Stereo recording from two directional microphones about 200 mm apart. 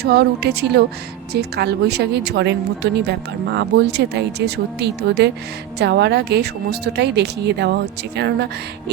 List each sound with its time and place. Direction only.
0.0 s speech: 55° right (ahead or behind)